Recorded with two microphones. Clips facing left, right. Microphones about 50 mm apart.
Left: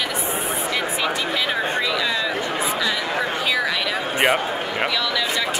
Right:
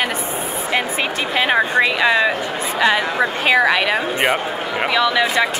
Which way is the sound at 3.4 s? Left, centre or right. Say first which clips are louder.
Right 7 dB; right.